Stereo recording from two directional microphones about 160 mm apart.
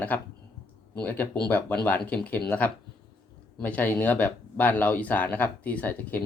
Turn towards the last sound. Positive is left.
turn(degrees=10)  # may be behind; listen again after turning